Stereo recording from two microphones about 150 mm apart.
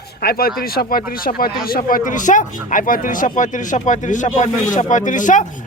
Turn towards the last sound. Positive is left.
turn(degrees=60)  # may be behind; listen again after turning